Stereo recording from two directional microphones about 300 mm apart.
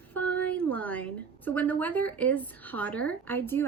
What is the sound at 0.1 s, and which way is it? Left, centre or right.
A woman's voice, centre.